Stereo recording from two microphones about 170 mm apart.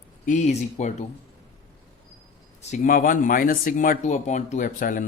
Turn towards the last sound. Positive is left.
turn(degrees=50)  # may be behind; listen again after turning